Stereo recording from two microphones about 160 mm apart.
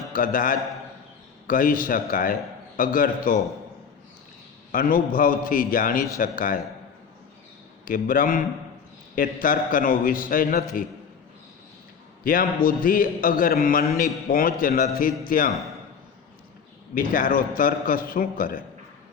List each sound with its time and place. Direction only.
0.1 s a man's voice: 60° left (ahead or behind)
4.7 s a man's voice: 60° left (ahead or behind)
7.9 s a man's voice: 60° left (ahead or behind)
12.2 s a man's voice: 60° left (ahead or behind)
16.9 s a man's voice: 60° left (ahead or behind)